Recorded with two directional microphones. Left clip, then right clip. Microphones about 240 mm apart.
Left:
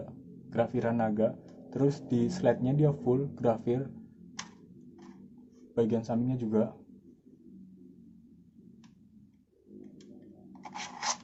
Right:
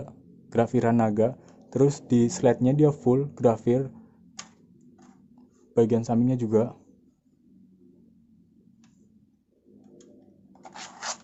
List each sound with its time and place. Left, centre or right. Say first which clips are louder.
0.5 s speech: right 6 dB; right
5.7 s speech: right 7 dB; right
10.6 s scissors: left 1 dB; centre